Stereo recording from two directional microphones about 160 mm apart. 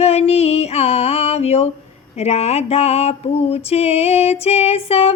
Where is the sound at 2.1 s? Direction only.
40° left (ahead or behind).